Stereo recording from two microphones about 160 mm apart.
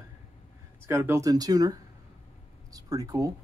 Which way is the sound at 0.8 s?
15° right (ahead or behind).